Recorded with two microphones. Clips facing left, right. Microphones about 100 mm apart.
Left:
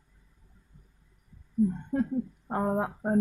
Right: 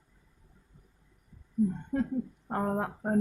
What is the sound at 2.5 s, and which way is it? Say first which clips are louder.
Speech: left 2 dB; 10° left (ahead or behind).